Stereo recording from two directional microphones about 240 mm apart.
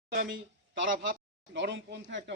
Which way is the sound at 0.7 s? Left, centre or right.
Right.